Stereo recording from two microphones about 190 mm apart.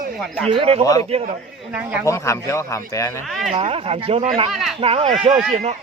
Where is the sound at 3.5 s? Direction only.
30° right (ahead or behind).